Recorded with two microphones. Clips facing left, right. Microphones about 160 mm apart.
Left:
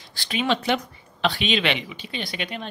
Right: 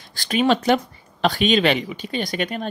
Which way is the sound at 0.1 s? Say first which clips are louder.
Right 6 dB; 45° right (ahead or behind).